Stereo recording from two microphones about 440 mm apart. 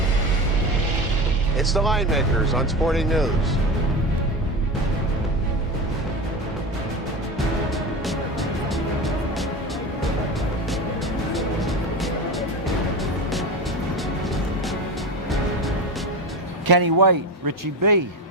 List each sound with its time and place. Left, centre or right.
1.5 s speech: centre
16.6 s a man's voice: right